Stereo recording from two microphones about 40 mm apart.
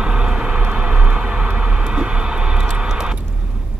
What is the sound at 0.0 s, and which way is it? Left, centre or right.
Vehicle, right.